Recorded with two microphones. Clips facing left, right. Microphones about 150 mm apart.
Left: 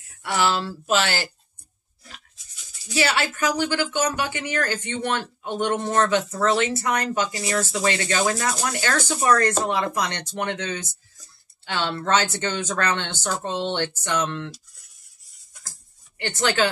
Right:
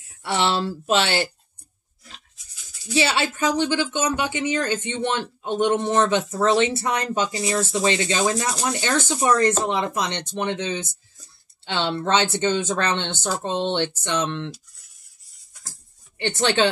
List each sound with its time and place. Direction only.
0.2 s speech: 25° right (ahead or behind)
2.9 s speech: 25° right (ahead or behind)
16.2 s speech: 25° right (ahead or behind)